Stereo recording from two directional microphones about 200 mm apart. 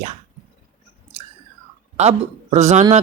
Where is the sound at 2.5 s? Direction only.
35° right (ahead or behind).